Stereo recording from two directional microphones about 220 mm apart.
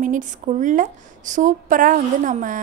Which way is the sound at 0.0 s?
35° right (ahead or behind).